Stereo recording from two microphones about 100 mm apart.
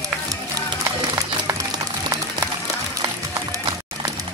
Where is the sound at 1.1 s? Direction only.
30° right (ahead or behind).